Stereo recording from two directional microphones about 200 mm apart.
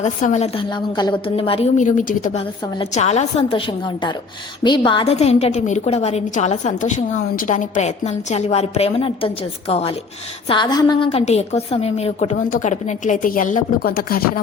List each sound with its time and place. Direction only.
0.0 s a woman's voice: 35° left (ahead or behind)
1.8 s a woman's voice: 40° left (ahead or behind)